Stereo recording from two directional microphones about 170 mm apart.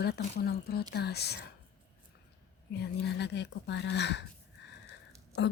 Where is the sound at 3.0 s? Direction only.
85° left.